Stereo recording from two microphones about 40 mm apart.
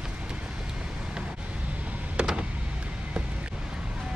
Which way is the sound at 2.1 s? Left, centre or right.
Right.